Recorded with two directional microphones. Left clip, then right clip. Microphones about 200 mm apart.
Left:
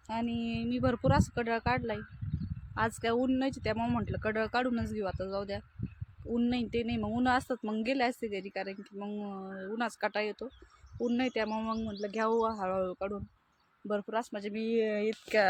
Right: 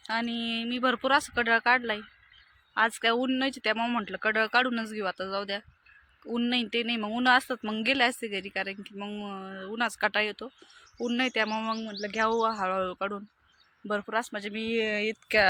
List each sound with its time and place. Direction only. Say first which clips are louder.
0.3 s speech: right 5 dB; 40° right (ahead or behind)
0.6 s speech: right 3 dB; 5° left (ahead or behind)